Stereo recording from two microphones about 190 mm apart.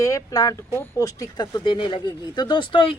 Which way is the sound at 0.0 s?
15° left (ahead or behind).